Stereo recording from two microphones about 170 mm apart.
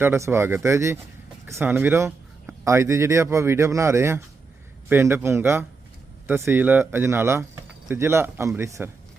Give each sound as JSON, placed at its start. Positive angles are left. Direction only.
{"t": 0.0, "sound": "speech", "side_deg": -15}